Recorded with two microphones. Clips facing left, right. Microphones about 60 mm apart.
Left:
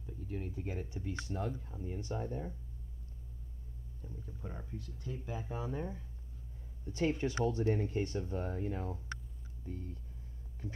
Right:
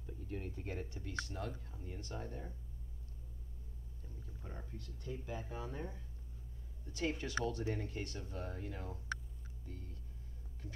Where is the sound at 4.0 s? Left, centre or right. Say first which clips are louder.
Left 7 dB; centre.